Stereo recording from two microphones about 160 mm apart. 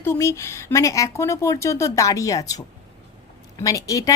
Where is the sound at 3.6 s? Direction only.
20° left (ahead or behind).